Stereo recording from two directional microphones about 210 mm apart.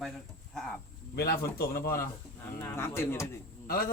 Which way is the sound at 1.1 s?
50° left (ahead or behind).